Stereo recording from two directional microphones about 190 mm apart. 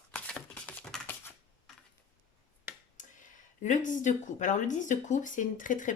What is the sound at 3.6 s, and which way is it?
Speech, 40° left (ahead or behind).